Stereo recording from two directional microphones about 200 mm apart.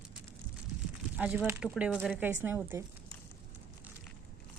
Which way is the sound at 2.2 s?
10° right (ahead or behind).